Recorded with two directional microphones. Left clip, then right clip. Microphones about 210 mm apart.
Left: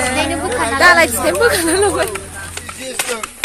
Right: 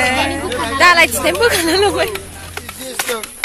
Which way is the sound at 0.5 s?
30° left (ahead or behind).